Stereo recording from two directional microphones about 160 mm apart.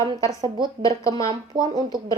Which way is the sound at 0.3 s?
30° right (ahead or behind).